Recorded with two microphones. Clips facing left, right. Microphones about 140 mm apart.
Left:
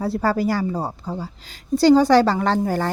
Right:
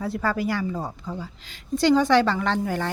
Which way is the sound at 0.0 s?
35° left (ahead or behind).